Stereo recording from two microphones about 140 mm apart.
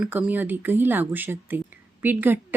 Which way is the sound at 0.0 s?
10° right (ahead or behind).